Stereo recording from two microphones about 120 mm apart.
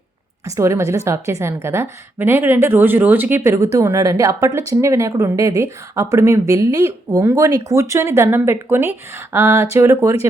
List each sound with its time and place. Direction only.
0.4 s a woman's voice: 25° right (ahead or behind)